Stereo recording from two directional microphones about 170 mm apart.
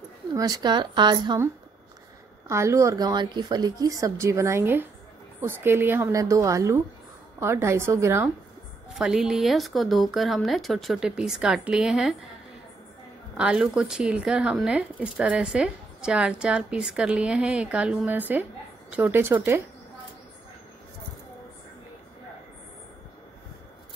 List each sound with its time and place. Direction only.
0.3 s a woman's voice: 20° right (ahead or behind)
8.9 s speech: 5° right (ahead or behind)
13.4 s a woman's voice: 5° right (ahead or behind)